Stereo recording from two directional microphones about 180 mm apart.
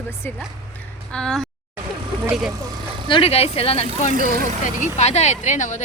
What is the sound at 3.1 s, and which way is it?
Speech, 30° left (ahead or behind).